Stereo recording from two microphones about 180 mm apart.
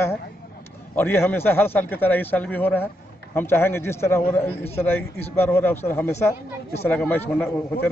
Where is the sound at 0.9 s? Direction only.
10° left (ahead or behind).